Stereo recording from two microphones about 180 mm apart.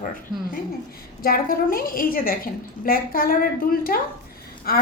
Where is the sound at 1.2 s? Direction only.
55° left (ahead or behind).